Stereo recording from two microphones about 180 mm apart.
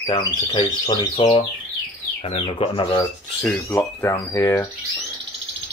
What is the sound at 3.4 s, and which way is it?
Speech, 15° left (ahead or behind).